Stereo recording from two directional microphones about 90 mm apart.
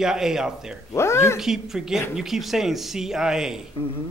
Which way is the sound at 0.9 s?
30° left (ahead or behind).